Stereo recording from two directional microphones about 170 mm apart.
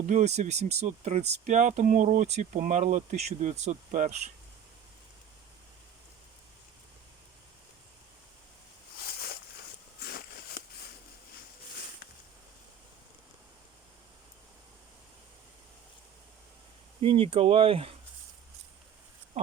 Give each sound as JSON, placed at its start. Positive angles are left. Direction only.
{"t": 0.1, "sound": "speech", "side_deg": -40}
{"t": 10.0, "sound": "a sound", "side_deg": 65}
{"t": 17.0, "sound": "speech", "side_deg": -35}